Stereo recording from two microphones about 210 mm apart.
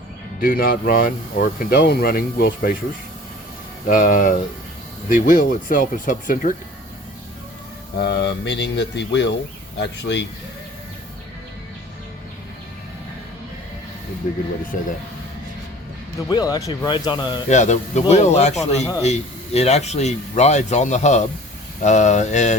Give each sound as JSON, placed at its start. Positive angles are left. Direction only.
{"t": 0.4, "sound": "speech", "side_deg": 45}
{"t": 3.8, "sound": "speech", "side_deg": 40}
{"t": 7.9, "sound": "speech", "side_deg": 55}
{"t": 14.3, "sound": "speech", "side_deg": 40}
{"t": 16.3, "sound": "speech", "side_deg": 20}
{"t": 17.5, "sound": "speech", "side_deg": 35}